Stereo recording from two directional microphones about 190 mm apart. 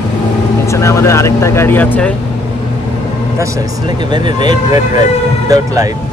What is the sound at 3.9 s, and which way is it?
Speech, 25° right (ahead or behind).